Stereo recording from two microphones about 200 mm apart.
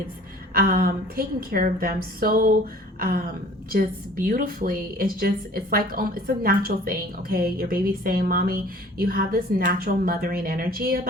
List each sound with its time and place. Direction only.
0.5 s a woman's voice: 50° right (ahead or behind)
3.7 s a woman's voice: 45° right (ahead or behind)